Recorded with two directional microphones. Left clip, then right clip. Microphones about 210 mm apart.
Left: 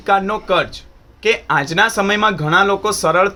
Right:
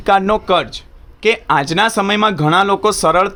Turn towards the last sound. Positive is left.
turn(degrees=-55)  # may be behind; listen again after turning